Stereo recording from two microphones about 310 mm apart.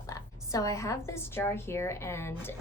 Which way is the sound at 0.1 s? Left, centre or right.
Centre.